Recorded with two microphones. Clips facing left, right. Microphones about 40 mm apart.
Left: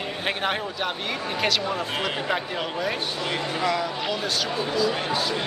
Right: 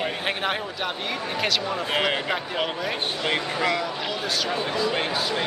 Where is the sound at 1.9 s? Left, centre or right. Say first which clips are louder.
Right 2 dB; centre.